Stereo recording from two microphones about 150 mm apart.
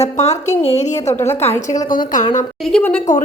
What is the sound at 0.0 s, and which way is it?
Speech, 45° left (ahead or behind).